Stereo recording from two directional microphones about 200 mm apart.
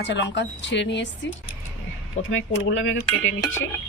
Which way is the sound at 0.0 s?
60° left (ahead or behind).